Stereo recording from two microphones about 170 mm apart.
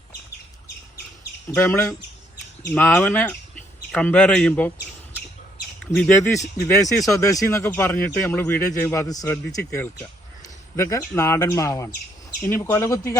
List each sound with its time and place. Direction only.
1.5 s speech: 10° left (ahead or behind)
5.8 s speech: 5° left (ahead or behind)
6.7 s speech: 20° left (ahead or behind)